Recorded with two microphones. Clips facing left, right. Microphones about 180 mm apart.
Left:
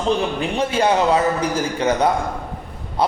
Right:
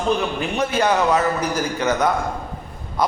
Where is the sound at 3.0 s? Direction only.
30° left (ahead or behind).